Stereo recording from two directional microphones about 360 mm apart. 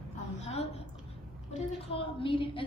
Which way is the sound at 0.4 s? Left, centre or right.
Centre.